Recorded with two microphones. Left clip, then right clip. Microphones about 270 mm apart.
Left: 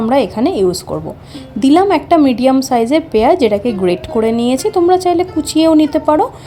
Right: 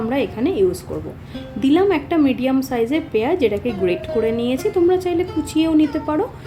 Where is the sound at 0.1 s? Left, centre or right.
Left.